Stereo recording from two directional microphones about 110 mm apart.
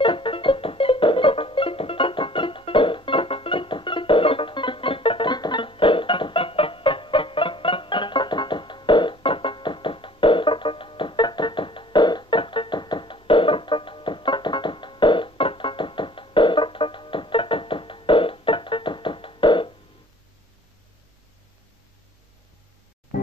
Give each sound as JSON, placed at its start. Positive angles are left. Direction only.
{"t": 0.0, "sound": "music", "side_deg": 50}